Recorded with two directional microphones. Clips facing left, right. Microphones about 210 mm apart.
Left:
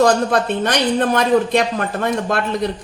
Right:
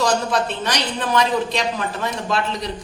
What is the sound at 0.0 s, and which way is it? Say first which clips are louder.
A man's voice: left 5 dB; 55° left (ahead or behind).